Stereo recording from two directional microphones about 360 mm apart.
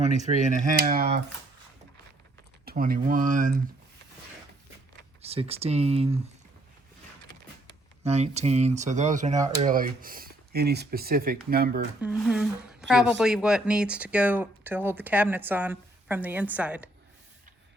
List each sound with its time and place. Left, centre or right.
0.3 s speech: centre
2.6 s speech: right
5.2 s speech: centre
8.0 s speech: centre
11.9 s speech: centre